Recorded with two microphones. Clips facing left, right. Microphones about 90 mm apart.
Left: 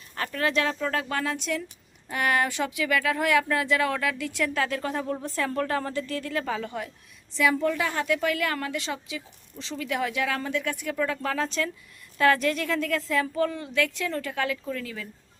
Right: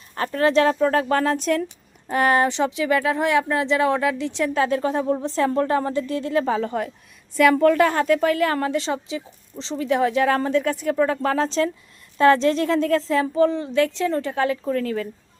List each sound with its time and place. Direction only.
0.1 s a woman's voice: 35° right (ahead or behind)
7.3 s a woman's voice: 60° right (ahead or behind)